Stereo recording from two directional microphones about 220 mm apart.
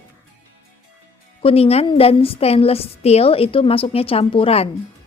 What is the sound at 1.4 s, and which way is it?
A woman's voice, 25° left (ahead or behind).